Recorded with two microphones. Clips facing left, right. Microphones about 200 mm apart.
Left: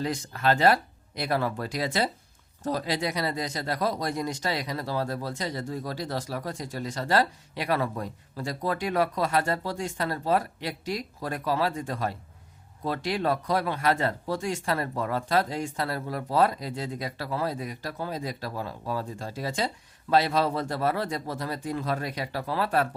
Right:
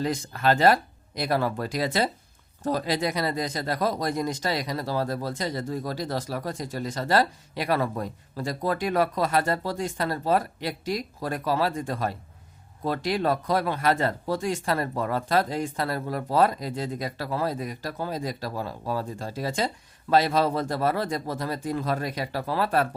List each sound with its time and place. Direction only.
0.0 s speech: 45° right (ahead or behind)